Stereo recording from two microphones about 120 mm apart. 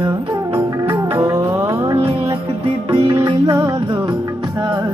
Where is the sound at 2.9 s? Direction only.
40° right (ahead or behind).